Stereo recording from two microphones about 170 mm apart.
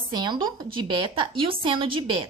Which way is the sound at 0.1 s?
25° right (ahead or behind).